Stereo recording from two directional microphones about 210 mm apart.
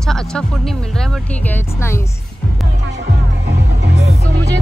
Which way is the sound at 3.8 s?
55° right (ahead or behind).